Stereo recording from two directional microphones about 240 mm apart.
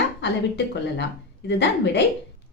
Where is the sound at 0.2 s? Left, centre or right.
Left.